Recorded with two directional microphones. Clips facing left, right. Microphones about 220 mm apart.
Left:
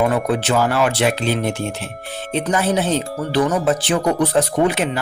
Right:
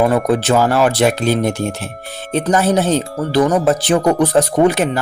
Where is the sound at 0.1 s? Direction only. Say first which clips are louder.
Right 4 dB; 40° right (ahead or behind).